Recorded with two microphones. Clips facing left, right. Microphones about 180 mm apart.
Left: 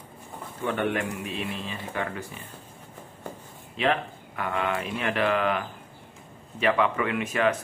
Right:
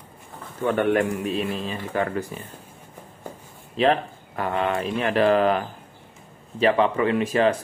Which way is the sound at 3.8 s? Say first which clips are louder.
Right 5 dB; 35° right (ahead or behind).